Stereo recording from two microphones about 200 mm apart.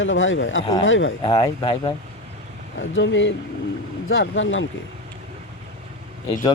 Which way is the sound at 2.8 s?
70° left (ahead or behind).